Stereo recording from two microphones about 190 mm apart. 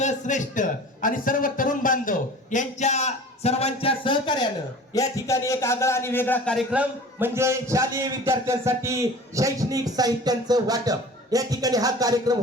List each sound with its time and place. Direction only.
0.0 s a man's voice: 40° left (ahead or behind); by 6.6 s 10° left (ahead or behind)
6.7 s a man's voice: 10° right (ahead or behind)